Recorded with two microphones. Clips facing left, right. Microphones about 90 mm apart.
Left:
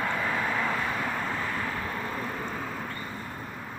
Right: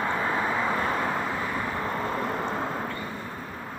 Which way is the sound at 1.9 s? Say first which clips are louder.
Right 5 dB; 30° right (ahead or behind).